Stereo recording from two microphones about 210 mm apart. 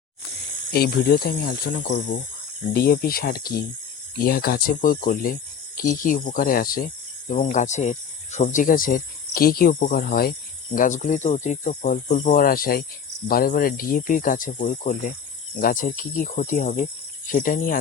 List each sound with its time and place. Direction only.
0.7 s speech: 45° left (ahead or behind)